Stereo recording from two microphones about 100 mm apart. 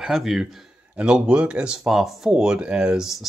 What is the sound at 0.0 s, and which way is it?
Speech, 5° right (ahead or behind).